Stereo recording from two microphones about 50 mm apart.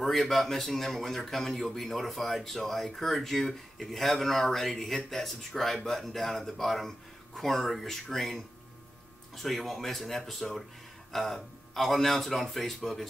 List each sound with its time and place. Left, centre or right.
0.0 s a man's voice: centre
9.4 s a man's voice: centre